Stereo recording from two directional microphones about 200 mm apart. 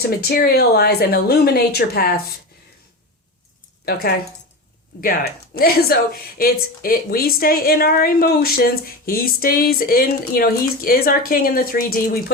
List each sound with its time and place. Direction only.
0.0 s speech: 50° left (ahead or behind)
4.9 s speech: 45° left (ahead or behind)